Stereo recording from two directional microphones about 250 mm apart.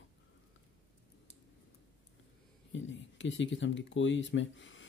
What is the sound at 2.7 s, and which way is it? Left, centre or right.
Speech, left.